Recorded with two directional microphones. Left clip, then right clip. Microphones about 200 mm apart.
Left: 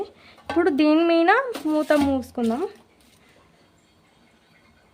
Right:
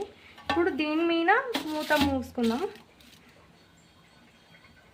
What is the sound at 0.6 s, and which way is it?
A woman's voice, 60° left (ahead or behind).